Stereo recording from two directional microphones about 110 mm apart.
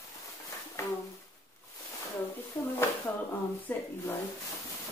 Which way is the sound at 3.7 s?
15° left (ahead or behind).